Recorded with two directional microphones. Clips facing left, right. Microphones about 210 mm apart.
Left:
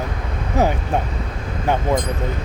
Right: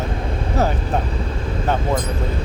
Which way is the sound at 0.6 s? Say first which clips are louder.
Left 2 dB; 15° left (ahead or behind).